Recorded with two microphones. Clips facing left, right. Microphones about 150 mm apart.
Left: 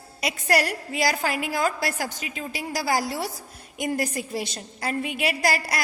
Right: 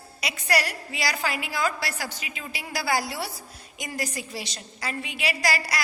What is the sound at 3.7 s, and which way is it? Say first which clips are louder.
A woman's voice: left 6 dB; 55° left (ahead or behind).